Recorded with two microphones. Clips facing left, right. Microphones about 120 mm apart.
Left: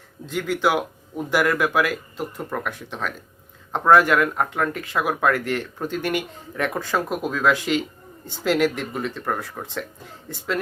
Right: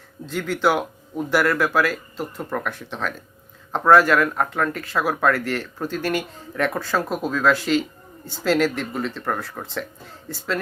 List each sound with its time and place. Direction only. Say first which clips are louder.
0.3 s speech: right 1 dB; 15° left (ahead or behind)